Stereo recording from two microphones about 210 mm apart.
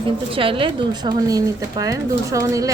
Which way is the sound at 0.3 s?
25° right (ahead or behind).